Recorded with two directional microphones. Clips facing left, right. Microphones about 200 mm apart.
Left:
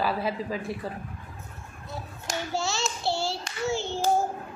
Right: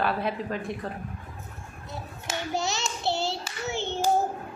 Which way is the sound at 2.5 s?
20° right (ahead or behind).